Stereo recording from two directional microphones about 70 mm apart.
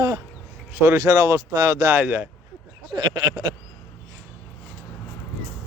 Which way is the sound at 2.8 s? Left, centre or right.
Right.